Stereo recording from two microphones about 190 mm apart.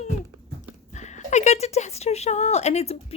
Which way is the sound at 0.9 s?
40° left (ahead or behind).